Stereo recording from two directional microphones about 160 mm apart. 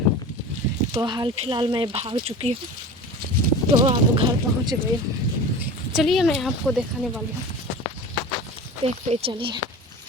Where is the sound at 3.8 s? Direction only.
30° right (ahead or behind).